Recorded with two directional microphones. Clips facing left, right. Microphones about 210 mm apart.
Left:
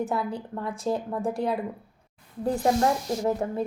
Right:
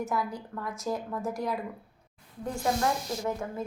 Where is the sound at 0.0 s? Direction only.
30° left (ahead or behind).